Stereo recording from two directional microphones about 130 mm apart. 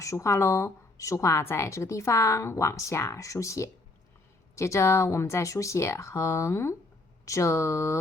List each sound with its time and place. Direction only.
0.0 s a woman's voice: 25° left (ahead or behind)